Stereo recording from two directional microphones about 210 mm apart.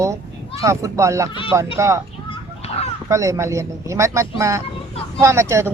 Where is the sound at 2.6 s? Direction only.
30° left (ahead or behind).